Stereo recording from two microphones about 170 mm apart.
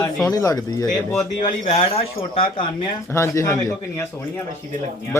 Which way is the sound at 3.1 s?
15° left (ahead or behind).